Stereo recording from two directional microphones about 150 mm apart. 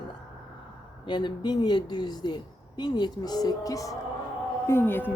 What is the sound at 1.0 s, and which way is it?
A woman's voice, 30° left (ahead or behind).